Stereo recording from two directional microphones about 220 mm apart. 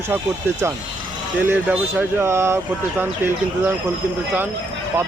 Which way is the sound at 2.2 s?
10° right (ahead or behind).